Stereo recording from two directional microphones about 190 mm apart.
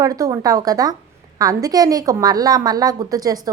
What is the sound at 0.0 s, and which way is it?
A woman's voice, 20° right (ahead or behind).